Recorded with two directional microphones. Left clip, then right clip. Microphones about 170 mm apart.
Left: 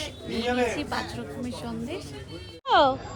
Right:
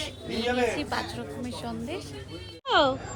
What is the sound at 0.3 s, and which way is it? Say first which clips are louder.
Speech: even; 15° left (ahead or behind).